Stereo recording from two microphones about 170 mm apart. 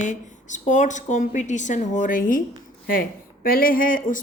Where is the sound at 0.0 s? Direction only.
45° left (ahead or behind).